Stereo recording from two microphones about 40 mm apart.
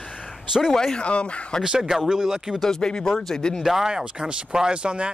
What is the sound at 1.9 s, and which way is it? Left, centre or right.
Speech, centre.